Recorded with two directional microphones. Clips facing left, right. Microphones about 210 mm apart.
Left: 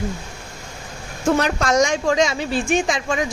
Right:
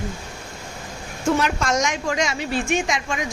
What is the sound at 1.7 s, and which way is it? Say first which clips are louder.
A woman's voice: left 5 dB; 30° left (ahead or behind).